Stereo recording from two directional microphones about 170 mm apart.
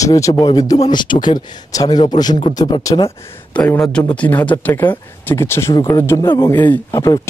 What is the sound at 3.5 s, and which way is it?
Speech, 5° left (ahead or behind).